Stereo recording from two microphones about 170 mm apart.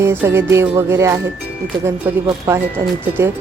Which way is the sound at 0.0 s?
15° right (ahead or behind).